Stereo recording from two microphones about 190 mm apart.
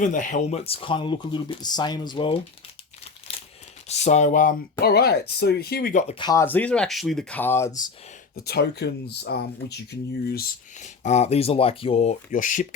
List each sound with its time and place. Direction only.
0.0 s speech: 40° left (ahead or behind); by 2.4 s 25° left (ahead or behind)
3.8 s speech: 35° left (ahead or behind)
6.1 s speech: 20° left (ahead or behind)
8.4 s speech: 60° left (ahead or behind)
10.8 s speech: 40° left (ahead or behind)